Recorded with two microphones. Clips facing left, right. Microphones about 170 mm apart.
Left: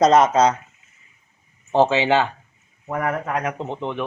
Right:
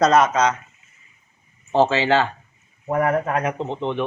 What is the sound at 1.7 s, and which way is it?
Speech, 15° left (ahead or behind).